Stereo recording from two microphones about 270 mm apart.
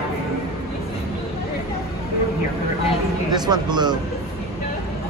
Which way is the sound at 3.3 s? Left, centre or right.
Centre.